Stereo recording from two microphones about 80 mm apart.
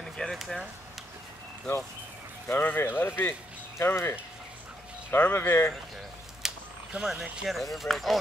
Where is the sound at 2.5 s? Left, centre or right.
Left.